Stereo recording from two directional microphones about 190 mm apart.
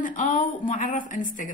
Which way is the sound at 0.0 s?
45° left (ahead or behind).